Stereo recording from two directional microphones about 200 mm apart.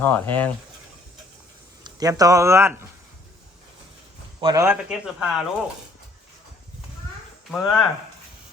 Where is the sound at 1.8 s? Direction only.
20° right (ahead or behind).